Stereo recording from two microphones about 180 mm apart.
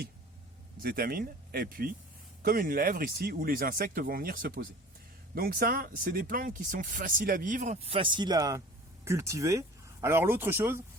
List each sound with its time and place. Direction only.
0.8 s speech: 55° right (ahead or behind); by 10.8 s 15° right (ahead or behind)